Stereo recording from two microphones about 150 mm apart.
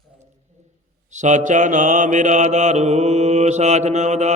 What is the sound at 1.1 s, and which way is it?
Mantra, 55° right (ahead or behind).